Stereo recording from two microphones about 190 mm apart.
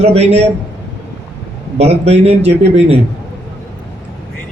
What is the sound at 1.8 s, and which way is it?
A man's voice, 35° right (ahead or behind).